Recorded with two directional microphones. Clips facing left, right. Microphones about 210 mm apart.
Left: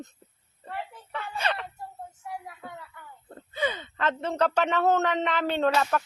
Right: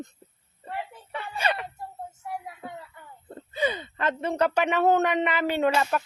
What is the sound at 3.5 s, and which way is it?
Speech, 10° right (ahead or behind).